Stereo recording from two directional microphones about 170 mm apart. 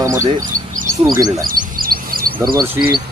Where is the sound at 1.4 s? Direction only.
60° right (ahead or behind).